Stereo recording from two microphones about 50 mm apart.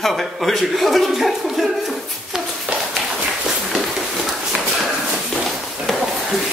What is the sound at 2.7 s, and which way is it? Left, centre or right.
Tap, right.